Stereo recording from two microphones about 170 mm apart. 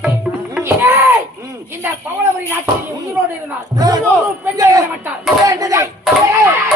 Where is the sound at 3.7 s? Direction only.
20° right (ahead or behind).